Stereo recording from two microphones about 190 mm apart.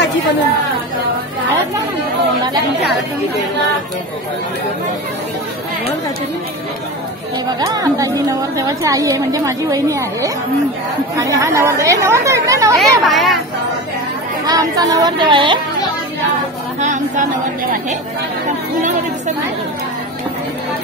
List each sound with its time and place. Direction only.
7.4 s a woman's voice: 20° right (ahead or behind)
12.7 s speech: centre (ahead or behind)
14.4 s speech: 20° right (ahead or behind)
16.8 s speech: 40° right (ahead or behind)
18.8 s speech: 40° right (ahead or behind)